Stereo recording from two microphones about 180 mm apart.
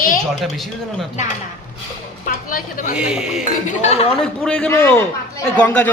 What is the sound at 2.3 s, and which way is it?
Speech, 50° left (ahead or behind).